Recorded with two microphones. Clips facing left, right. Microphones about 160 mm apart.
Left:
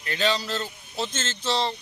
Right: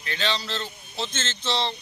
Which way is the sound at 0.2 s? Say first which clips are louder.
Left 4 dB; 5° left (ahead or behind).